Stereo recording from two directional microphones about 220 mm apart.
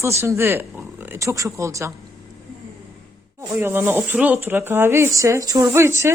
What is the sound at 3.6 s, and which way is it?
Speech, 10° right (ahead or behind).